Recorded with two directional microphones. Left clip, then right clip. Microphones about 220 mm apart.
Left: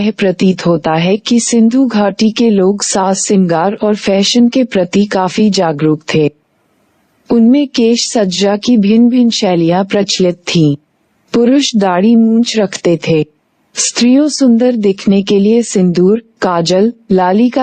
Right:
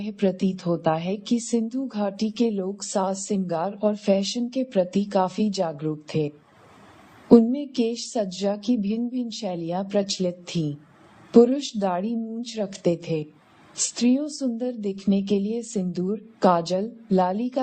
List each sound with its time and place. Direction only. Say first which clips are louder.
0.0 s speech: left 13 dB; 45° left (ahead or behind)
7.3 s speech: left 9 dB; 45° left (ahead or behind)